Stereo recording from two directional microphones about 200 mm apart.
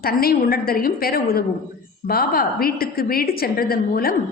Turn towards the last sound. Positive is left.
turn(degrees=50)  # may be behind; listen again after turning